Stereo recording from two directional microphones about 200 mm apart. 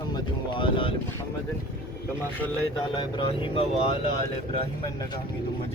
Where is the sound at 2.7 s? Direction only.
25° left (ahead or behind).